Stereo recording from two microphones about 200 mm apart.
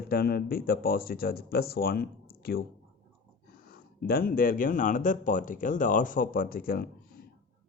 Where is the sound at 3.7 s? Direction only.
50° left (ahead or behind).